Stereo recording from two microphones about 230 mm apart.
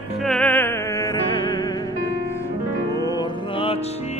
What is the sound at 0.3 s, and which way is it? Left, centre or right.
Music, centre.